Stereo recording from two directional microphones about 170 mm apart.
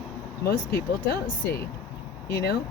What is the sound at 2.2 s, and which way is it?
Speech, 70° left (ahead or behind).